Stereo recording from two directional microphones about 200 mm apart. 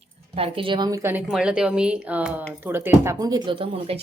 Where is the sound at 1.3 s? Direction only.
5° right (ahead or behind).